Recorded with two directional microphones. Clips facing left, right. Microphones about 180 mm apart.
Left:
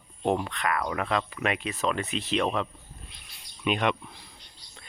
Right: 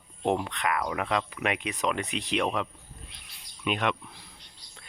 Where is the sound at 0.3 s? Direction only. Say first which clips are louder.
Even; 15° right (ahead or behind).